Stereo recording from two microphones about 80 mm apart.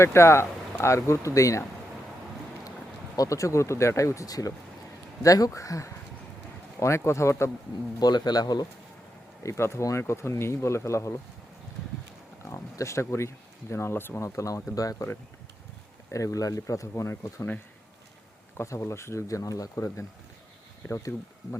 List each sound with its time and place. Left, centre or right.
0.0 s speech: left
3.2 s speech: left
7.9 s speech: left
9.4 s speech: left
12.5 s speech: left
14.3 s speech: left
16.1 s speech: left
18.5 s speech: left